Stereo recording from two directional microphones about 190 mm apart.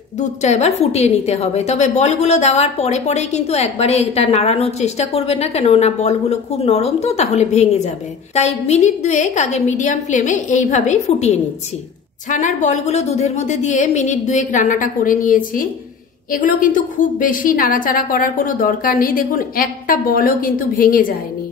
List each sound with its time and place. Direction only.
0.2 s a woman's voice: 35° left (ahead or behind)